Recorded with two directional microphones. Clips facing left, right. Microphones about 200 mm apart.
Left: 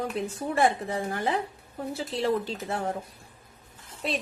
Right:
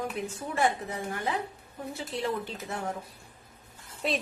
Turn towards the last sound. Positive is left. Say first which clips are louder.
# right 1 dB
turn(degrees=0)  # may be behind; listen again after turning